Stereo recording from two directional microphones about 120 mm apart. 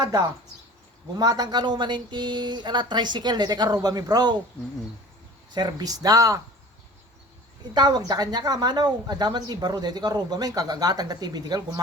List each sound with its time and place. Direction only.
1.2 s a woman's voice: 35° right (ahead or behind)
5.5 s a woman's voice: 35° right (ahead or behind)
7.7 s a woman's voice: 35° right (ahead or behind)